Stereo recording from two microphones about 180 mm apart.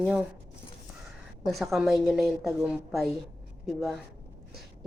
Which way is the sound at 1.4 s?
Centre (ahead or behind).